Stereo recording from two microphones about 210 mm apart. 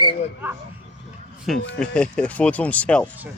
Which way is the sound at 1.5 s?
5° left (ahead or behind).